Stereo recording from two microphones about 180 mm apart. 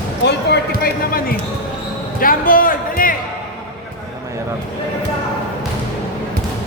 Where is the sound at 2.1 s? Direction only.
50° left (ahead or behind).